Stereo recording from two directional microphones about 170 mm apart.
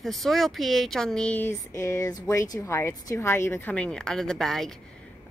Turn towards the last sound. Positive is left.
turn(degrees=0)  # may be behind; listen again after turning